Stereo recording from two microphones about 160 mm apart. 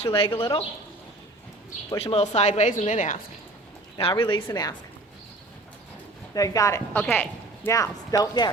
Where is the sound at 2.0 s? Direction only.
40° left (ahead or behind).